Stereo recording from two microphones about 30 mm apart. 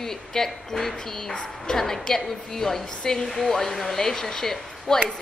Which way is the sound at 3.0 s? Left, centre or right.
Left.